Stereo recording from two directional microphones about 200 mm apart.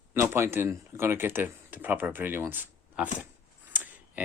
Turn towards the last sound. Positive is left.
turn(degrees=-10)  # may be behind; listen again after turning